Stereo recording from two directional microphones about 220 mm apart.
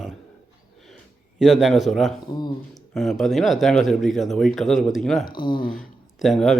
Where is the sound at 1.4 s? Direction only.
Centre (ahead or behind).